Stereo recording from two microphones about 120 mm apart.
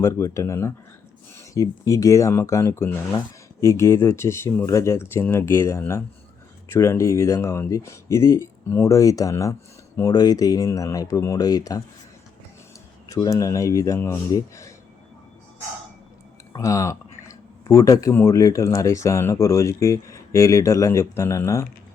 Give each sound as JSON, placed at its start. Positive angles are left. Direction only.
{"t": 0.3, "sound": "speech", "side_deg": 25}
{"t": 13.1, "sound": "speech", "side_deg": 30}
{"t": 16.5, "sound": "speech", "side_deg": 25}